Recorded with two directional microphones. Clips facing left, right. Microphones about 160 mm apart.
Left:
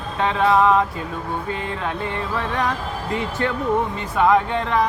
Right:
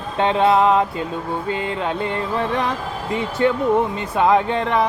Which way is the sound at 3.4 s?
20° right (ahead or behind).